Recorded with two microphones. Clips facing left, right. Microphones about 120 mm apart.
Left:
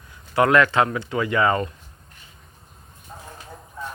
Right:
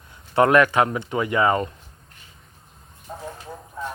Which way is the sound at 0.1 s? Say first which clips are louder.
Right 1 dB; 25° right (ahead or behind).